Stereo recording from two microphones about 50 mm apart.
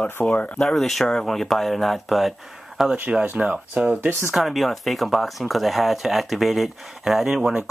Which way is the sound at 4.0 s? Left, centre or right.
Right.